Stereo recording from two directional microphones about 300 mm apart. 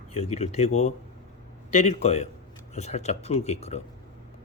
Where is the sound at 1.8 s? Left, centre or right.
Left.